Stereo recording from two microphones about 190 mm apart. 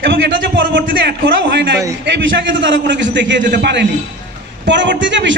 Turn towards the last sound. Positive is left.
turn(degrees=-75)  # may be behind; listen again after turning